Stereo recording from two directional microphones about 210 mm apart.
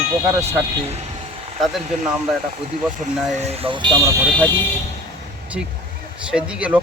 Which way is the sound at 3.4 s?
30° right (ahead or behind).